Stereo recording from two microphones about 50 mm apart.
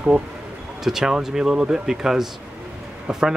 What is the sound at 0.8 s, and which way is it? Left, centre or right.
Speech, centre.